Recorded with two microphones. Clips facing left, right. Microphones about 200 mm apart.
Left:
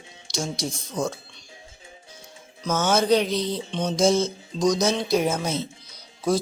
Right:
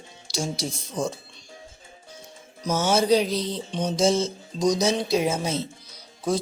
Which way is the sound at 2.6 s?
10° right (ahead or behind).